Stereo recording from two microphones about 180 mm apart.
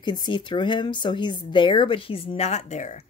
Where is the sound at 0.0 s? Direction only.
25° left (ahead or behind).